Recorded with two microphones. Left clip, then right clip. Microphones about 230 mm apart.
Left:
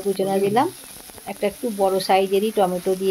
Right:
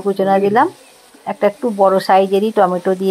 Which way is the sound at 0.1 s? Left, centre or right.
Centre.